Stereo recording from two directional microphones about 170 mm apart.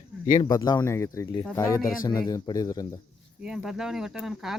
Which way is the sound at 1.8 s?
55° left (ahead or behind).